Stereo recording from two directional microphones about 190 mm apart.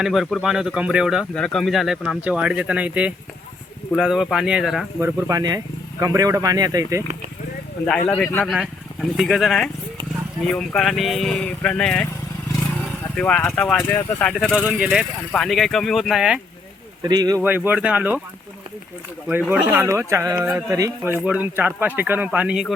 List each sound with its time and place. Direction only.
0.0 s speech: centre (ahead or behind)
4.9 s speech: 15° right (ahead or behind)
7.9 s speech: 5° left (ahead or behind)
13.1 s speech: 5° left (ahead or behind)
14.6 s speech: 5° right (ahead or behind)
17.0 s speech: 20° right (ahead or behind)
17.4 s speech: 10° right (ahead or behind)
19.3 s speech: 10° right (ahead or behind)